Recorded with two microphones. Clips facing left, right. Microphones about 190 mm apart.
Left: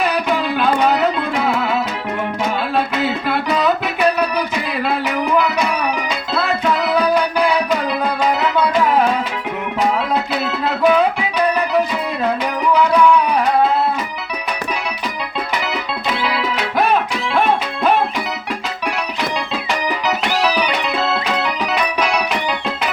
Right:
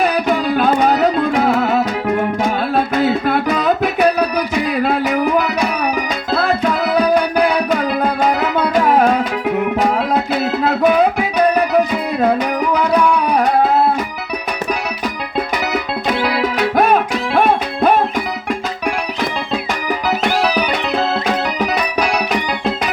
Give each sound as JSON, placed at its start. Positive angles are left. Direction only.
{"t": 0.0, "sound": "music", "side_deg": -45}
{"t": 4.8, "sound": "music", "side_deg": -45}
{"t": 7.1, "sound": "music", "side_deg": -50}
{"t": 10.3, "sound": "music", "side_deg": -50}
{"t": 13.2, "sound": "music", "side_deg": -50}
{"t": 15.6, "sound": "music", "side_deg": -45}
{"t": 20.2, "sound": "music", "side_deg": -45}